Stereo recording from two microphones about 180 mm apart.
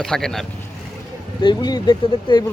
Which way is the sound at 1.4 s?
25° left (ahead or behind).